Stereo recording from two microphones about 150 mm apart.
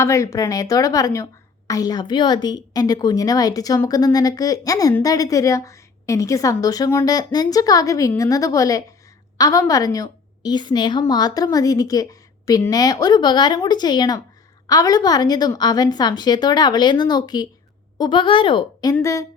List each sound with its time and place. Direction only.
0.0 s a woman's voice: 20° left (ahead or behind)